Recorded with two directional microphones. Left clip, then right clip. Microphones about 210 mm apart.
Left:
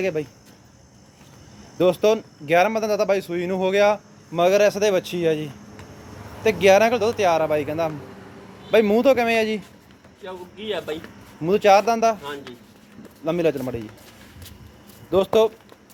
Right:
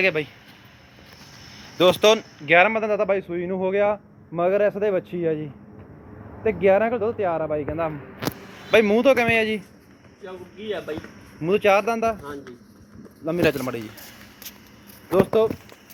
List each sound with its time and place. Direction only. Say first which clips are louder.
0.0 s speech: right 3 dB; 10° left (ahead or behind)
1.8 s speech: right 2 dB; 5° left (ahead or behind)
2.6 s speech: even; 20° left (ahead or behind)
10.2 s speech: left 2 dB; 5° right (ahead or behind)
11.4 s speech: left 3 dB; 15° left (ahead or behind)
13.2 s speech: even; 15° left (ahead or behind)
13.5 s speech: even; centre (ahead or behind)
15.1 s speech: left 1 dB; 15° left (ahead or behind)